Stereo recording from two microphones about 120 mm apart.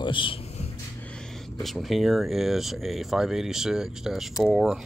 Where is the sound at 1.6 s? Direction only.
Centre (ahead or behind).